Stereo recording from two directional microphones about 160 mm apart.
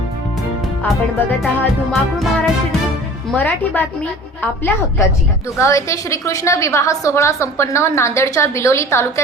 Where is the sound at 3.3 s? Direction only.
10° left (ahead or behind).